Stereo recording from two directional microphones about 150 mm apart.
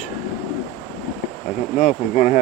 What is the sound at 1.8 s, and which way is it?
Speech, 50° left (ahead or behind).